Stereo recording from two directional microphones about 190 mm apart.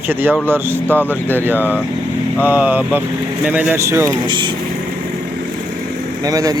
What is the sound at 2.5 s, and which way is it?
Speech, 10° right (ahead or behind).